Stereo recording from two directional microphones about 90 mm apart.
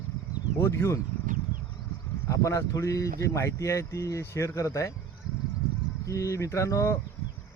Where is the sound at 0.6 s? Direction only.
30° left (ahead or behind).